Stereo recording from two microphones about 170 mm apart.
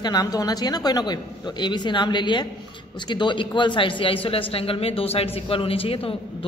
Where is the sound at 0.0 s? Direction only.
25° left (ahead or behind).